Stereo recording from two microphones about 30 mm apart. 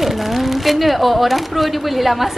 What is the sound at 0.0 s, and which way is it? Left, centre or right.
A woman's voice, centre.